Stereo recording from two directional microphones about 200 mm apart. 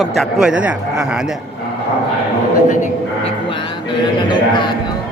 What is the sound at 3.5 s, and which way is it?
Music, 25° left (ahead or behind).